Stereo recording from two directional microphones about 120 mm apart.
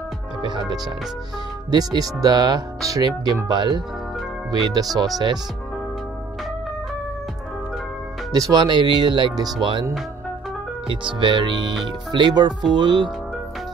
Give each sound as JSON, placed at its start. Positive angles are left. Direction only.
{"t": 0.4, "sound": "speech", "side_deg": -40}
{"t": 4.9, "sound": "speech", "side_deg": -30}
{"t": 8.3, "sound": "speech", "side_deg": -30}
{"t": 10.9, "sound": "speech", "side_deg": -45}